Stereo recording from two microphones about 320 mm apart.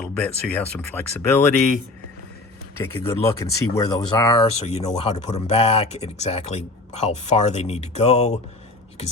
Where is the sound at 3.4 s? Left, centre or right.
Centre.